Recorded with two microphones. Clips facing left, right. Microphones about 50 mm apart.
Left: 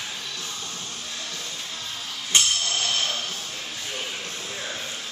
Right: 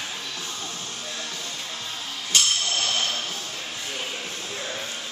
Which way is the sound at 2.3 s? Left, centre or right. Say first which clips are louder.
Left 1 dB; left.